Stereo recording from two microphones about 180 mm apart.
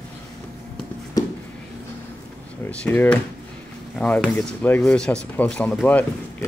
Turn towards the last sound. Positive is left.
turn(degrees=10)  # may be behind; listen again after turning